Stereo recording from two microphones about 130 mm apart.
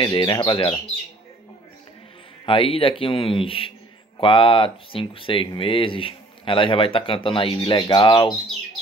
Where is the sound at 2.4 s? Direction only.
45° left (ahead or behind).